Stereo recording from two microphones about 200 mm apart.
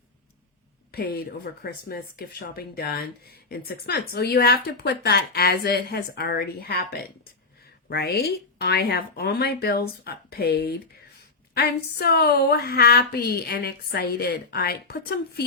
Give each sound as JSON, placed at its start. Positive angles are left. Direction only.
{"t": 0.9, "sound": "speech", "side_deg": 50}